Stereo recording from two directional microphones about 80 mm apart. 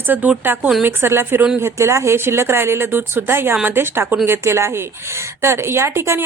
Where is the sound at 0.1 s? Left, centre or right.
Right.